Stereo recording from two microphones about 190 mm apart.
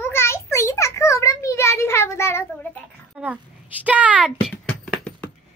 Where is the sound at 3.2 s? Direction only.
5° right (ahead or behind).